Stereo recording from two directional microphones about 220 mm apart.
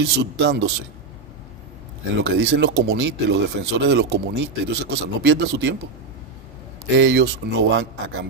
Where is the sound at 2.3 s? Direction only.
50° right (ahead or behind).